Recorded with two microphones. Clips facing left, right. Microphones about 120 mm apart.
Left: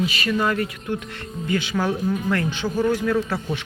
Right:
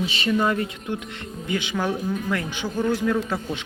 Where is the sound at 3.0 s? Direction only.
15° right (ahead or behind).